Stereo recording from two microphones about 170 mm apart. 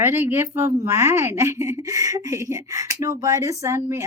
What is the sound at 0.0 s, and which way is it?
A woman's voice, 15° right (ahead or behind).